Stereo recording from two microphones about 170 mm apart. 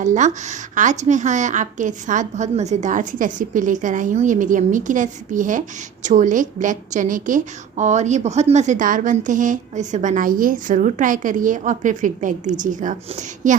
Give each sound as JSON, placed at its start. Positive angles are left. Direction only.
{"t": 0.0, "sound": "a woman's voice", "side_deg": -45}